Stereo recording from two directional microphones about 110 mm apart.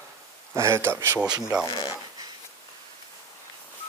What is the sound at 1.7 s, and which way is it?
Speech, 40° left (ahead or behind).